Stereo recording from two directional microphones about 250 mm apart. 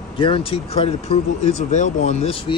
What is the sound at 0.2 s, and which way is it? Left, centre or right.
Speech, left.